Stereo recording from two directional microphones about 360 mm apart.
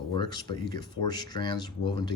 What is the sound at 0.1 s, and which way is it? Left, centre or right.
Speech, centre.